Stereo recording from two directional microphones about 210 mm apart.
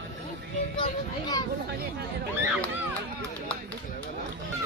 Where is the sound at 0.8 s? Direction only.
20° left (ahead or behind).